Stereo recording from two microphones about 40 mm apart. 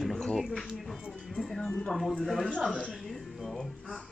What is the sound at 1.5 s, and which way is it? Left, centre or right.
Speech, centre.